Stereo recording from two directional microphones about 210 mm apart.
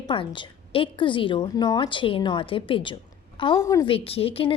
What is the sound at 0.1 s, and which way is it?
A woman's voice, 25° left (ahead or behind).